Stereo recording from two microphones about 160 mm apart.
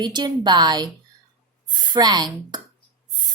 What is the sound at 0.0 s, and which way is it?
Speech, 25° right (ahead or behind).